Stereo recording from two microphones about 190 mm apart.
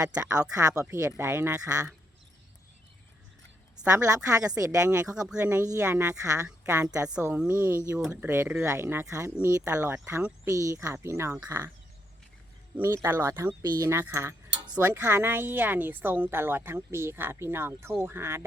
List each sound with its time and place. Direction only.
0.0 s speech: 20° right (ahead or behind)
3.8 s speech: 15° right (ahead or behind)
5.3 s speech: 5° right (ahead or behind)
7.0 s speech: 5° right (ahead or behind)
12.7 s speech: 15° right (ahead or behind)